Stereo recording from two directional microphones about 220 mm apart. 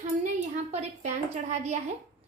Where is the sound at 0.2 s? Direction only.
30° right (ahead or behind).